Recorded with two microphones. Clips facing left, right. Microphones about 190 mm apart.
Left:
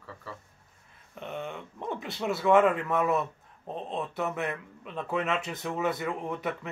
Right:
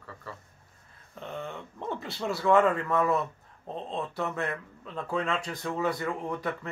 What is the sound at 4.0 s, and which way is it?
Speech, centre (ahead or behind).